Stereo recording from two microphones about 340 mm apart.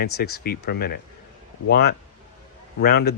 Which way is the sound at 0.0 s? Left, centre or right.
Left.